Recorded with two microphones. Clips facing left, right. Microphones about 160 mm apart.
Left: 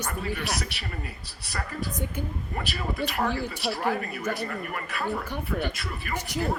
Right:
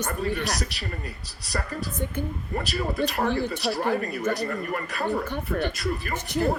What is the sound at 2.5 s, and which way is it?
A man's voice, 40° right (ahead or behind).